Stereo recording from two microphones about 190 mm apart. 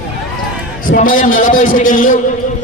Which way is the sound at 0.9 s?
45° left (ahead or behind).